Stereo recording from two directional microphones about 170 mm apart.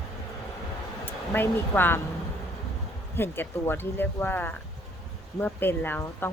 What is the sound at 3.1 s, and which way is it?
Speech, 15° left (ahead or behind).